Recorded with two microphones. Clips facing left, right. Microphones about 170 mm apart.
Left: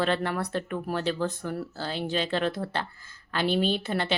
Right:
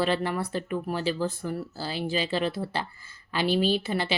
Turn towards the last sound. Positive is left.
turn(degrees=-5)  # may be behind; listen again after turning